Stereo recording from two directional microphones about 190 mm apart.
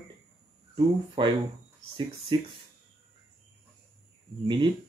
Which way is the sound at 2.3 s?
25° right (ahead or behind).